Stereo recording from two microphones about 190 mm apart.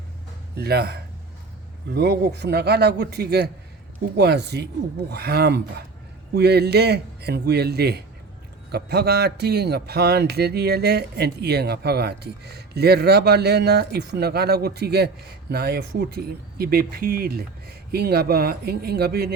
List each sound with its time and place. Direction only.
0.5 s a man's voice: 55° right (ahead or behind)